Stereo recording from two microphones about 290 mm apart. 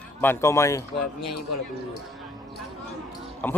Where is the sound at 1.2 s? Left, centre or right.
Left.